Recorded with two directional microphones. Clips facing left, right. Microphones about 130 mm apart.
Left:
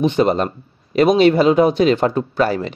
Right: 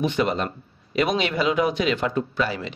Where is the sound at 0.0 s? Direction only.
30° left (ahead or behind).